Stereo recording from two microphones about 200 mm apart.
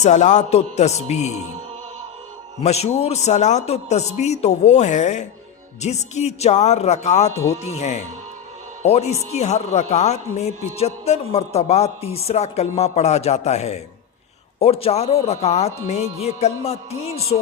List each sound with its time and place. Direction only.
0.0 s speech: 35° left (ahead or behind)
2.6 s speech: 30° left (ahead or behind)